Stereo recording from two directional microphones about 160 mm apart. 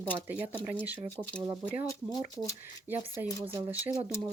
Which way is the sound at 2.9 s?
15° right (ahead or behind).